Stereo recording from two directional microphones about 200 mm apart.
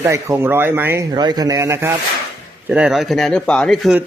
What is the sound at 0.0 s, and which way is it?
Speech, 15° right (ahead or behind).